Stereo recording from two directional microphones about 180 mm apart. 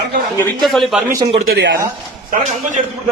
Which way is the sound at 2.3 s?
45° right (ahead or behind).